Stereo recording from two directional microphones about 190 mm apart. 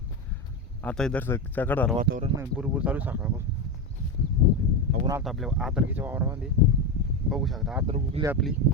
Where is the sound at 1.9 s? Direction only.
50° right (ahead or behind).